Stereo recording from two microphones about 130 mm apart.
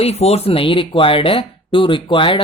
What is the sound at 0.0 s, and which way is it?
Speech, 55° left (ahead or behind).